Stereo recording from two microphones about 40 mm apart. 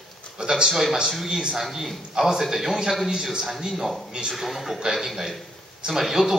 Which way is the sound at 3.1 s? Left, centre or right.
Centre.